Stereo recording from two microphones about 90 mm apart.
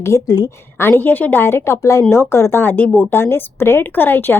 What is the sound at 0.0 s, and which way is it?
Speech, 40° left (ahead or behind).